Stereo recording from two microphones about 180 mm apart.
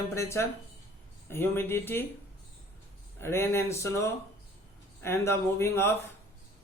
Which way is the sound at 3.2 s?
15° left (ahead or behind).